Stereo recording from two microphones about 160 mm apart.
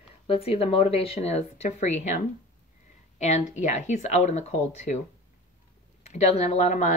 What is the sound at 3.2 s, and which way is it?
Speech, 45° left (ahead or behind).